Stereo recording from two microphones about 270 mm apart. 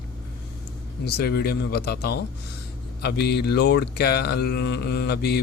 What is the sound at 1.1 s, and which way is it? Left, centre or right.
Speech, left.